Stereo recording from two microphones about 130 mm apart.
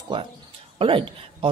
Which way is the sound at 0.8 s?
45° right (ahead or behind).